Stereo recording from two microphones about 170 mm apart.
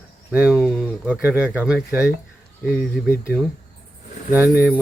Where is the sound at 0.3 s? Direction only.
5° right (ahead or behind).